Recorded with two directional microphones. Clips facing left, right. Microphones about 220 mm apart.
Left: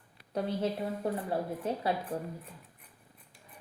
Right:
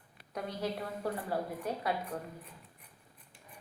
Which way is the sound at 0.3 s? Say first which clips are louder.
Left 5 dB; 30° left (ahead or behind).